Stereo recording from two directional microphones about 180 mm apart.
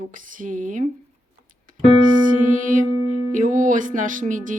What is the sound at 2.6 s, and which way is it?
Speech, 45° right (ahead or behind).